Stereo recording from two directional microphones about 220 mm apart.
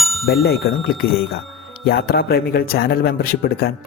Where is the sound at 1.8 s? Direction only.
50° left (ahead or behind).